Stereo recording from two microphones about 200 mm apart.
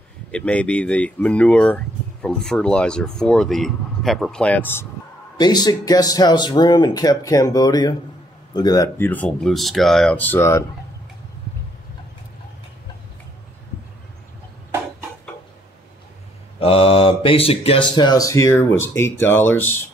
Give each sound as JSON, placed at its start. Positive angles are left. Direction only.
{"t": 0.3, "sound": "speech", "side_deg": 5}
{"t": 5.4, "sound": "speech", "side_deg": 20}
{"t": 16.5, "sound": "speech", "side_deg": 25}